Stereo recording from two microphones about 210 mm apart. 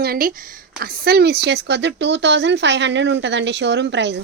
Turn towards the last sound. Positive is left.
turn(degrees=-55)  # may be behind; listen again after turning